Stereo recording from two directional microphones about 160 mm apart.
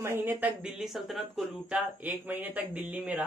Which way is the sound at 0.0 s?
15° right (ahead or behind).